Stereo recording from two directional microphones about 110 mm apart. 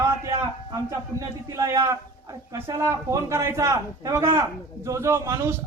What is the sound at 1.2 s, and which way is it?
A man's voice, 30° right (ahead or behind).